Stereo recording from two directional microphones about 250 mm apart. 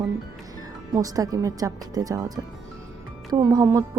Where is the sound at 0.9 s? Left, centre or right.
Centre.